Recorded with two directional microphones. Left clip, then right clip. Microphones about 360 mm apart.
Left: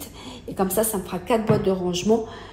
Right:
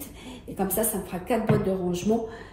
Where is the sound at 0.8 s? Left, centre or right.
Centre.